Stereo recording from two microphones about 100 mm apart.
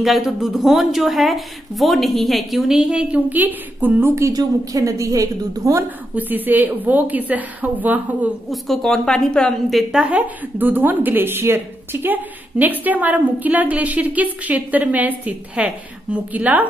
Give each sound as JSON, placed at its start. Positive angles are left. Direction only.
{"t": 0.0, "sound": "a woman's voice", "side_deg": -5}
{"t": 6.1, "sound": "a woman's voice", "side_deg": -20}
{"t": 8.5, "sound": "a woman's voice", "side_deg": 5}
{"t": 10.0, "sound": "a woman's voice", "side_deg": -15}